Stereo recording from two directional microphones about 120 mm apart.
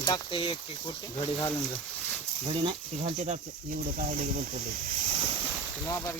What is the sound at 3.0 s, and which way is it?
Speech, 70° right (ahead or behind).